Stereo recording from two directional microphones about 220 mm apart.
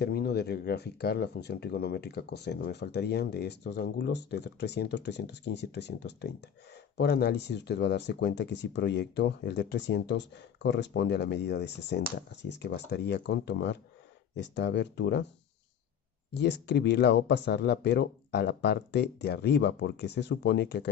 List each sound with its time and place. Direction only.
0.0 s speech: 45° left (ahead or behind)
16.3 s speech: 50° left (ahead or behind)